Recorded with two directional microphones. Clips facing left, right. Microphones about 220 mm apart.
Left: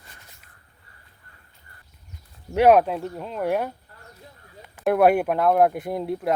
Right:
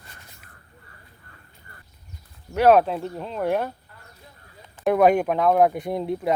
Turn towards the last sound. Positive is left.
turn(degrees=0)  # may be behind; listen again after turning